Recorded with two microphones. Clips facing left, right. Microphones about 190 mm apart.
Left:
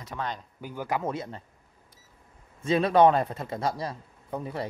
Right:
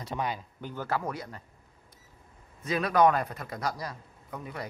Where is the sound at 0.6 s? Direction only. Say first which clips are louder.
Left 3 dB; 10° left (ahead or behind).